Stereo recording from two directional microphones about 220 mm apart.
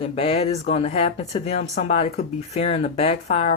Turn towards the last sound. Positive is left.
turn(degrees=30)  # may be behind; listen again after turning